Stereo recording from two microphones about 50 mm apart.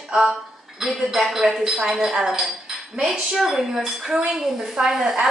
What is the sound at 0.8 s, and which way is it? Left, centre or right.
A woman's voice, centre.